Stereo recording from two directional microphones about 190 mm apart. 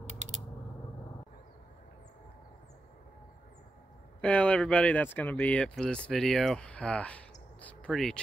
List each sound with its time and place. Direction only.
0.0 s mechanisms: 40° right (ahead or behind)
4.2 s speech: 5° left (ahead or behind)